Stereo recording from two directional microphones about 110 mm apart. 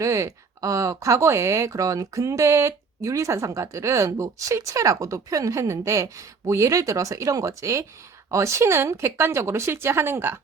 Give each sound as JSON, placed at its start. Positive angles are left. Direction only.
{"t": 0.0, "sound": "speech", "side_deg": -30}